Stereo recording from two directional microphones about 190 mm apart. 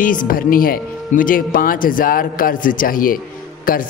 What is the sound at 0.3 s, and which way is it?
A man's voice, 50° left (ahead or behind).